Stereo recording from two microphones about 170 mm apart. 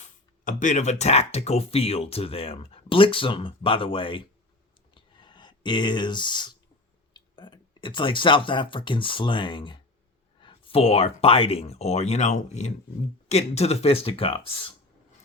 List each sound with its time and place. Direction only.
0.0 s speech: 45° left (ahead or behind); by 4.3 s 30° left (ahead or behind)
4.9 s a sound: 30° left (ahead or behind)
7.1 s speech: 25° left (ahead or behind)